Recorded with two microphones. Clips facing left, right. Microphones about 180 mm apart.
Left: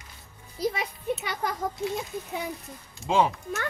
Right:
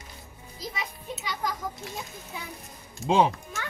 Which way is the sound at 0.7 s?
60° left (ahead or behind).